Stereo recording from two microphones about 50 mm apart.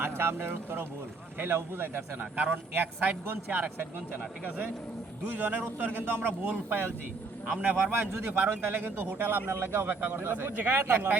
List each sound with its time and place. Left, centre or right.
0.0 s speech: right
2.1 s speech: right
2.7 s speech: right
5.4 s speech: right
9.5 s speech: right
9.8 s speech: right